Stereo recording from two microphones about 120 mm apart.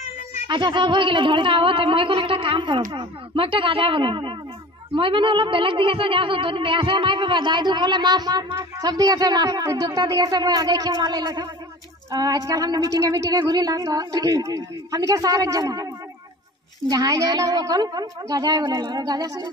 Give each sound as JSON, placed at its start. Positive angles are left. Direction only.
{"t": 0.5, "sound": "a sound", "side_deg": -40}
{"t": 4.9, "sound": "speech", "side_deg": -45}
{"t": 16.9, "sound": "speech", "side_deg": -30}